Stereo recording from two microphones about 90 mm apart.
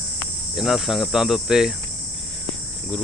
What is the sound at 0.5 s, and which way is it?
Cricket, centre (ahead or behind).